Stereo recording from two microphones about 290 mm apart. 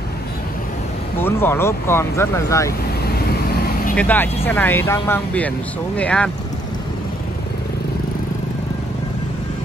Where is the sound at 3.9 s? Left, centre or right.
Centre.